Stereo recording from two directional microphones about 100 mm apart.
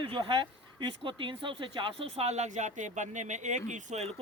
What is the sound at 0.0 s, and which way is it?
Speech, 60° right (ahead or behind).